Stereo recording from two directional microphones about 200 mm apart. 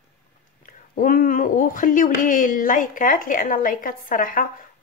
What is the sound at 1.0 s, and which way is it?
Speech, 45° left (ahead or behind).